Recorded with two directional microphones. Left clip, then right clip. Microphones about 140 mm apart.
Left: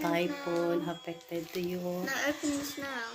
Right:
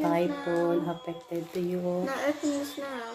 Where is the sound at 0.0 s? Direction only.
5° left (ahead or behind).